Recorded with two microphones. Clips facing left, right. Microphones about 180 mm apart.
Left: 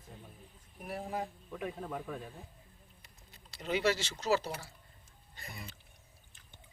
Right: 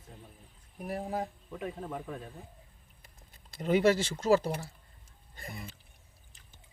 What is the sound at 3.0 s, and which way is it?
Speech, 50° right (ahead or behind).